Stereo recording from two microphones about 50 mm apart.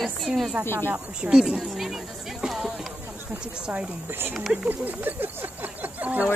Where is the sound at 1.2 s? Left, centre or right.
Right.